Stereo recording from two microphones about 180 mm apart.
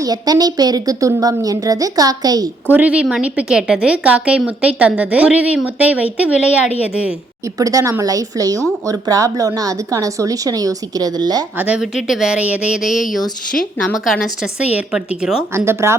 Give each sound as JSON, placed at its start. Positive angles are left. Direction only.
{"t": 0.0, "sound": "a woman's voice", "side_deg": -20}
{"t": 2.6, "sound": "a woman's voice", "side_deg": -10}
{"t": 7.4, "sound": "a woman's voice", "side_deg": -20}
{"t": 11.5, "sound": "a woman's voice", "side_deg": -10}